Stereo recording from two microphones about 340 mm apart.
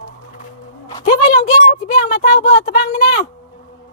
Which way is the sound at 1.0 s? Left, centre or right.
Left.